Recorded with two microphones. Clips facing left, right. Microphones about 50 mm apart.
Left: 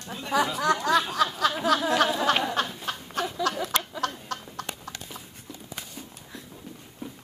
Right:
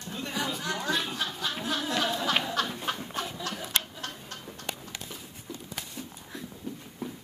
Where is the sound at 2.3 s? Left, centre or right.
Left.